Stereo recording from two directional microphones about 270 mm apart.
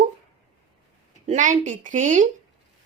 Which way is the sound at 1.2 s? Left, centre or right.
Right.